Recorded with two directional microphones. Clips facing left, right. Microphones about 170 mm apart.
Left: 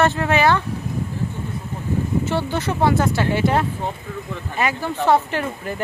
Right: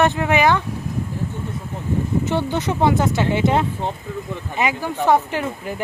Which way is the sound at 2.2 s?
20° right (ahead or behind).